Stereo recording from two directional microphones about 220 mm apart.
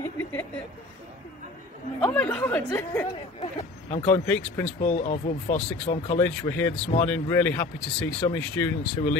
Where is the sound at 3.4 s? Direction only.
25° left (ahead or behind).